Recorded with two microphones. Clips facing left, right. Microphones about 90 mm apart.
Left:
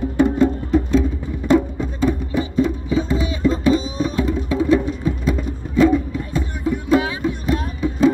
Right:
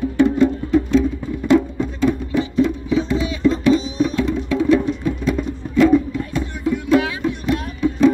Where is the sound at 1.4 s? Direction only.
15° left (ahead or behind).